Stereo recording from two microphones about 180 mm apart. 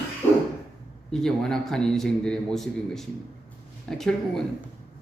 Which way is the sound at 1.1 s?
5° left (ahead or behind).